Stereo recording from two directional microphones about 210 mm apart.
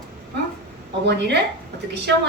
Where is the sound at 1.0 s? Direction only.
55° right (ahead or behind).